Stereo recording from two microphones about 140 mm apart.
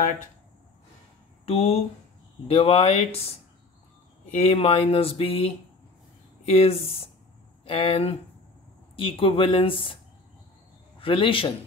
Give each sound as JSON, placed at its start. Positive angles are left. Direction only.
{"t": 1.4, "sound": "speech", "side_deg": 45}
{"t": 11.0, "sound": "speech", "side_deg": 40}